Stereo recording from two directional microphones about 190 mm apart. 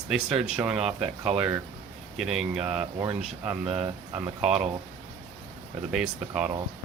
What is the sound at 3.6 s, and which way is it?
Speech, 30° right (ahead or behind).